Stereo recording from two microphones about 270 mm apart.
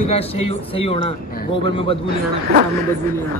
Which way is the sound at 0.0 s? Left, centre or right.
Left.